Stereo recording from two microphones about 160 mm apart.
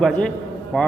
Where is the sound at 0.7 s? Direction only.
5° left (ahead or behind).